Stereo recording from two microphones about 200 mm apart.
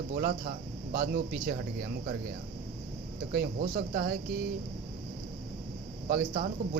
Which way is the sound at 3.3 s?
45° right (ahead or behind).